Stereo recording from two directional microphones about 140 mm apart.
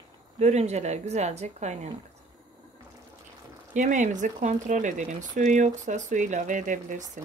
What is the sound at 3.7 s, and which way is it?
A woman's voice, 60° right (ahead or behind).